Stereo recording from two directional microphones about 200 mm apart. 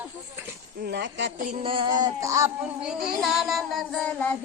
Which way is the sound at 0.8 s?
60° right (ahead or behind).